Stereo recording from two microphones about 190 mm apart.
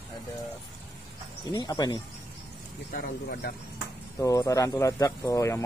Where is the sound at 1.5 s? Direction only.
20° left (ahead or behind).